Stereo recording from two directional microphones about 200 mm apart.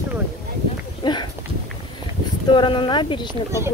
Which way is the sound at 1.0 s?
20° left (ahead or behind).